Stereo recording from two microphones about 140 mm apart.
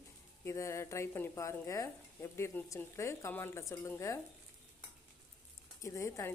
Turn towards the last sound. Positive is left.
turn(degrees=20)  # may be behind; listen again after turning